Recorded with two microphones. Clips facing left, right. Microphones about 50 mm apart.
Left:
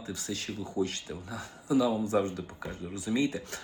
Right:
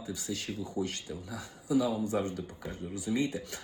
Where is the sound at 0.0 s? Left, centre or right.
Left.